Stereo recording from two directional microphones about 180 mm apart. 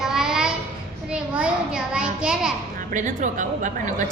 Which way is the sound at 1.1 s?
5° right (ahead or behind).